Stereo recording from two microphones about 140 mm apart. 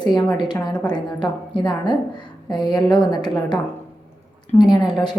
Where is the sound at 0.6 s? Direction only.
30° left (ahead or behind).